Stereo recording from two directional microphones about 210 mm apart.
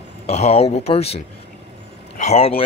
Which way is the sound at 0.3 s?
30° left (ahead or behind).